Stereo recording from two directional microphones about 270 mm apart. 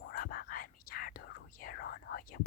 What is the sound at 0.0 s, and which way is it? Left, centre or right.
Speech, left.